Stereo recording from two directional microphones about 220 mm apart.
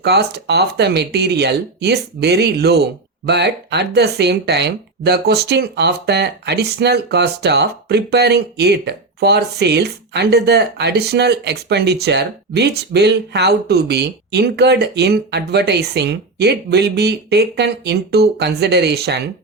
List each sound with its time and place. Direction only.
0.0 s speech: 50° right (ahead or behind)